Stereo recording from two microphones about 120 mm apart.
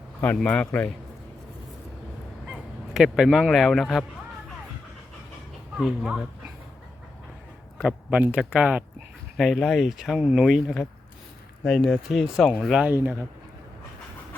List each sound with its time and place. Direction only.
0.2 s a man's voice: 15° left (ahead or behind)
2.5 s honk: 5° right (ahead or behind)
5.7 s speech: 5° right (ahead or behind)
7.8 s speech: 10° right (ahead or behind)
12.9 s speech: 15° right (ahead or behind)